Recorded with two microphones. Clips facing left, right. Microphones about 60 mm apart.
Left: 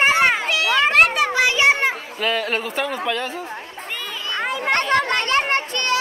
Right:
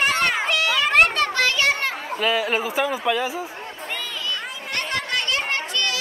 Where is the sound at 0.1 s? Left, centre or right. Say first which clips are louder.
Left 5 dB; centre.